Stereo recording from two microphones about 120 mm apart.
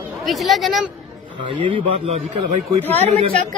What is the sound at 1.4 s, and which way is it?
Speech, 40° right (ahead or behind).